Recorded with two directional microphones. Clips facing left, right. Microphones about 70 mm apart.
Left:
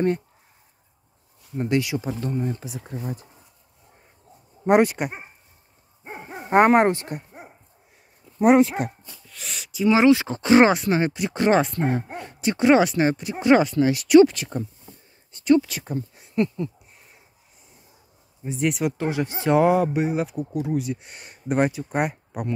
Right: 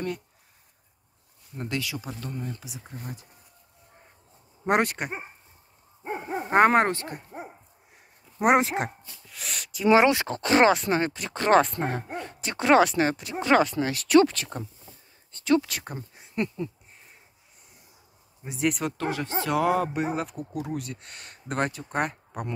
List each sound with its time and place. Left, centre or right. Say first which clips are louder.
1.6 s speech: left 9 dB; left
2.1 s speech: left 8 dB; left
4.6 s speech: left 6 dB; centre
6.5 s speech: left 3 dB; centre
8.5 s speech: left 5 dB; right
9.3 s speech: even; centre
10.2 s speech: left 4 dB; centre
11.8 s a sound: left 4 dB; centre
12.4 s speech: left 3 dB; centre
18.5 s speech: left 3 dB; centre
18.9 s speech: left 4 dB; centre
19.8 s speech: left 5 dB; centre